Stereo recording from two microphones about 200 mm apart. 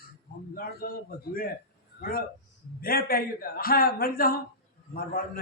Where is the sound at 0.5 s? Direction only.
45° left (ahead or behind).